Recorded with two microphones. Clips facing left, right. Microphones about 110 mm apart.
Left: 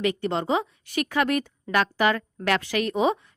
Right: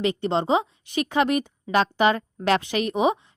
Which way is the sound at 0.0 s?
25° right (ahead or behind).